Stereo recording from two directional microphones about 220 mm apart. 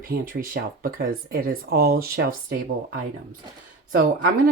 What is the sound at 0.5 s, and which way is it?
Speech, 40° right (ahead or behind).